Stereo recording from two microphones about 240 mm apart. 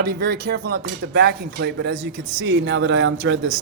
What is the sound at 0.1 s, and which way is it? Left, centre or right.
A man's voice, right.